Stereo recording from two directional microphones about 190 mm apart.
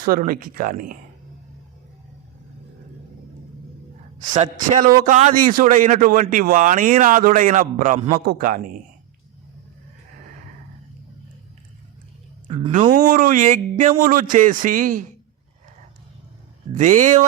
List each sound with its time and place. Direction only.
0.0 s a man's voice: 50° right (ahead or behind)
4.9 s a man's voice: 45° right (ahead or behind)
12.5 s speech: 35° right (ahead or behind)
12.9 s a man's voice: 45° right (ahead or behind)
16.7 s speech: 40° right (ahead or behind)